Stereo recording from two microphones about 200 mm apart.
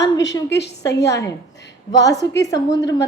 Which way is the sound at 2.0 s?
15° left (ahead or behind).